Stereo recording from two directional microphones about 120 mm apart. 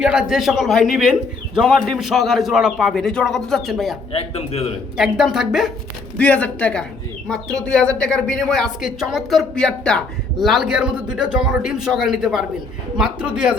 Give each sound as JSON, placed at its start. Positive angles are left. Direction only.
{"t": 0.0, "sound": "speech", "side_deg": -5}
{"t": 4.1, "sound": "speech", "side_deg": 60}
{"t": 4.9, "sound": "speech", "side_deg": -5}
{"t": 6.1, "sound": "a man's voice", "side_deg": 10}